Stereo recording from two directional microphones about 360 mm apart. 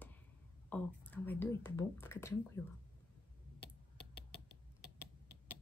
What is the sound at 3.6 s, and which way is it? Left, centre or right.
Typing, left.